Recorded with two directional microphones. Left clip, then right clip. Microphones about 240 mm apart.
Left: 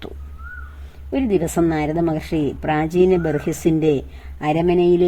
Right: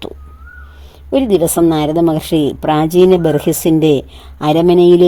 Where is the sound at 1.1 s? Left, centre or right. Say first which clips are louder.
Right 7 dB; right.